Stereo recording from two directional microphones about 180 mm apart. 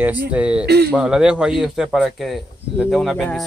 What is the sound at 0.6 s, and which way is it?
Speech, 65° right (ahead or behind).